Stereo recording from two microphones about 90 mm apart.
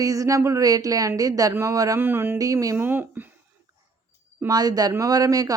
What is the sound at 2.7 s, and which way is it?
Speech, 20° right (ahead or behind).